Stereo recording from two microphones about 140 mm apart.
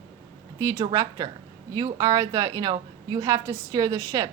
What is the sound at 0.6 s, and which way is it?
A woman's voice, 20° right (ahead or behind).